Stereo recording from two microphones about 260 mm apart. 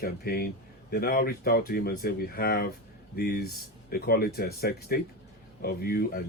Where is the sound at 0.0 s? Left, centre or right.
Left.